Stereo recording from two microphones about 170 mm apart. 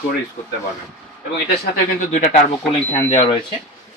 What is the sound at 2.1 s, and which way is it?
Speech, 45° left (ahead or behind).